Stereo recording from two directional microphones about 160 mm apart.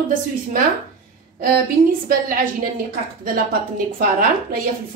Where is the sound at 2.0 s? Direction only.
60° right (ahead or behind).